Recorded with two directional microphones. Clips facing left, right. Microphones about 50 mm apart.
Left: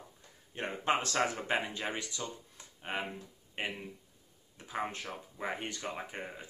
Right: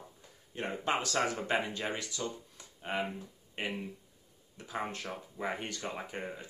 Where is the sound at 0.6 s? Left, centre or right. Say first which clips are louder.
Left 1 dB; left.